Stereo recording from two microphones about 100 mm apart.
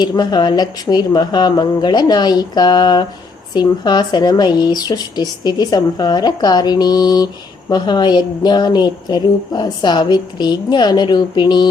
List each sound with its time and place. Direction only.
0.0 s a woman's voice: 45° left (ahead or behind)